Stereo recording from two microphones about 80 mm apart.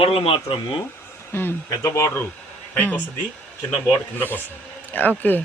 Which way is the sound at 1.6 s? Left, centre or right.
Left.